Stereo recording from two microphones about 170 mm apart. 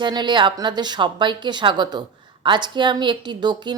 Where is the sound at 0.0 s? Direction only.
25° right (ahead or behind).